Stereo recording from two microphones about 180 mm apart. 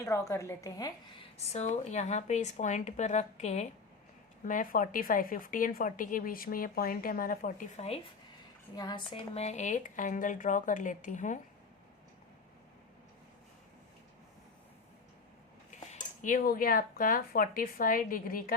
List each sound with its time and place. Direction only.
0.0 s a woman's voice: 15° left (ahead or behind)
1.4 s speech: 40° left (ahead or behind)
4.4 s a woman's voice: 50° left (ahead or behind)
8.7 s a woman's voice: 25° left (ahead or behind); by 11.3 s 45° left (ahead or behind)
16.2 s a woman's voice: 50° left (ahead or behind)